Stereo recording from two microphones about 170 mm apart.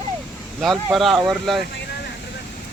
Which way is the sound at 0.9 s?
Centre (ahead or behind).